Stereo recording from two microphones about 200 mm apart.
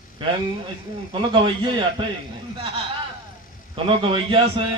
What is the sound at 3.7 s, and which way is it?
Speech, 25° right (ahead or behind).